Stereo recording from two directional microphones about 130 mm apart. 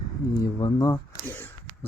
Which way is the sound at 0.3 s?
30° left (ahead or behind).